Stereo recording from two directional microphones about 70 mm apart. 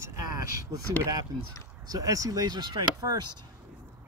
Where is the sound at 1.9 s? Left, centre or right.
Right.